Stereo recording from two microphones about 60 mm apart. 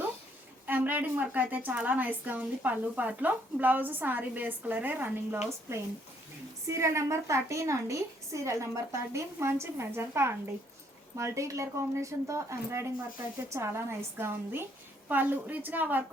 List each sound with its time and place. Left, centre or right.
0.7 s a woman's voice: right
5.7 s a woman's voice: right
11.2 s a woman's voice: right
15.1 s a woman's voice: right